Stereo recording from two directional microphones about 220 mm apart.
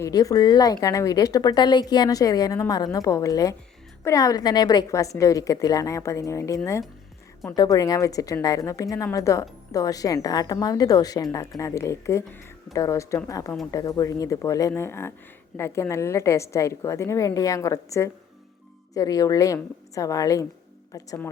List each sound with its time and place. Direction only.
0.0 s speech: 15° left (ahead or behind)